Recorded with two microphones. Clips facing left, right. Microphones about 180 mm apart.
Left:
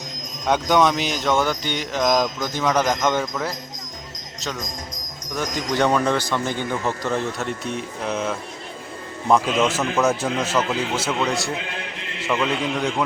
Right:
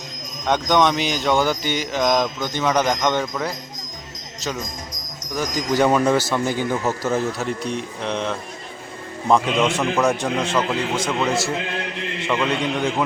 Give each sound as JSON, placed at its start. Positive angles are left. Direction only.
{"t": 0.4, "sound": "speech", "side_deg": 5}
{"t": 5.3, "sound": "speech", "side_deg": -5}